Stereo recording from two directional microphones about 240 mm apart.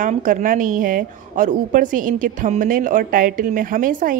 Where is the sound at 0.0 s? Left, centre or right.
Right.